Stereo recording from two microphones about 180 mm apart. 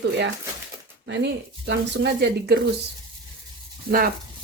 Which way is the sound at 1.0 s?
70° right (ahead or behind).